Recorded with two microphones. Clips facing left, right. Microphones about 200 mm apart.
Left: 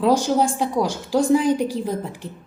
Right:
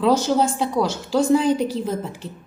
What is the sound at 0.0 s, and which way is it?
A woman's voice, 10° left (ahead or behind).